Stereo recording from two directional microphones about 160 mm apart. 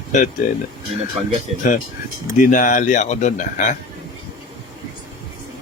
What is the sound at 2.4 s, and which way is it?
Speech, 55° left (ahead or behind).